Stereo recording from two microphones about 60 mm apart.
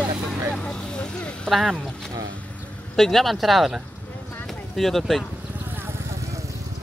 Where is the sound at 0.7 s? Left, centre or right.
Centre.